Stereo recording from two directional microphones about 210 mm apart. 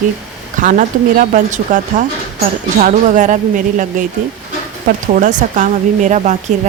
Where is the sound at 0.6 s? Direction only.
40° right (ahead or behind).